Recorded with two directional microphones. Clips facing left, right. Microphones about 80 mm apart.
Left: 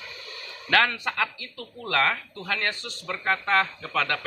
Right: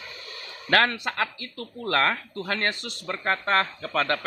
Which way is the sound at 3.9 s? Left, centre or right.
Right.